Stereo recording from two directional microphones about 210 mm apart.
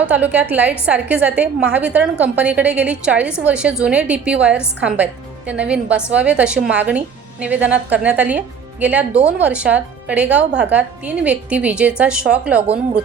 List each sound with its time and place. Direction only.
0.1 s a woman's voice: 5° right (ahead or behind)
12.6 s speech: 30° right (ahead or behind)